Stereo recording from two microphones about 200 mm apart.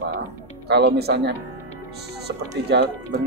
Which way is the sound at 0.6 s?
55° right (ahead or behind).